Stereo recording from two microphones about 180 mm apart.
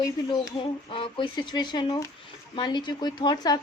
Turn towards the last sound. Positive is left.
turn(degrees=25)  # may be behind; listen again after turning